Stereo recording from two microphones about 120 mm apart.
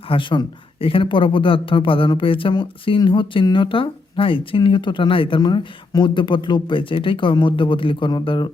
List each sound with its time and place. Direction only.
0.1 s speech: 45° left (ahead or behind)